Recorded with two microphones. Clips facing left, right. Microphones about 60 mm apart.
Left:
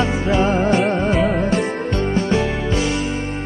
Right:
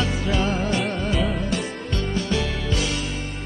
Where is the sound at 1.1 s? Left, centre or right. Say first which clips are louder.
Left 7 dB; left.